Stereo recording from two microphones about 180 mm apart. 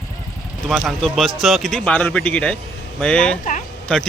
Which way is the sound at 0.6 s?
Centre (ahead or behind).